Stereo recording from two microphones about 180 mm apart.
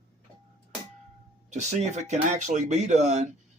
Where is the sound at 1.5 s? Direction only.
40° right (ahead or behind).